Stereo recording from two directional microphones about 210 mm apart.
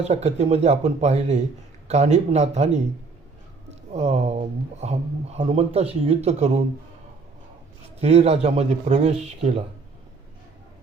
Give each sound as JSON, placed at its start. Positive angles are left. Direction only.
{"t": 0.0, "sound": "speech", "side_deg": -30}
{"t": 8.0, "sound": "speech", "side_deg": -30}